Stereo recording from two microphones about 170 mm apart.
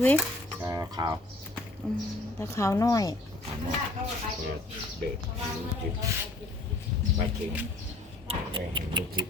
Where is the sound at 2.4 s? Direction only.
15° left (ahead or behind).